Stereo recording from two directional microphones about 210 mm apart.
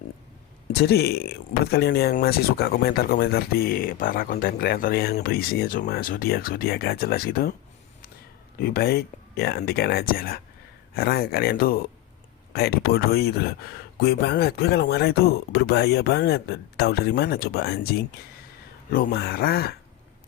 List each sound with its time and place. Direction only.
0.7 s speech: 50° left (ahead or behind)
8.5 s speech: 45° left (ahead or behind)